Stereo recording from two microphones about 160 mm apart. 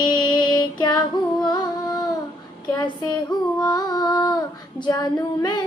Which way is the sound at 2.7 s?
30° left (ahead or behind).